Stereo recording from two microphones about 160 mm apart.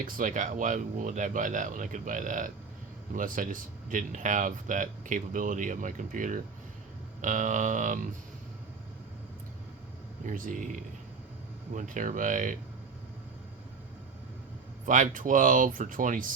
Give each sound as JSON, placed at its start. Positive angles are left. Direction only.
{"t": 0.0, "sound": "speech", "side_deg": -55}
{"t": 7.2, "sound": "a sound", "side_deg": -50}
{"t": 10.2, "sound": "speech", "side_deg": -55}
{"t": 14.8, "sound": "speech", "side_deg": -55}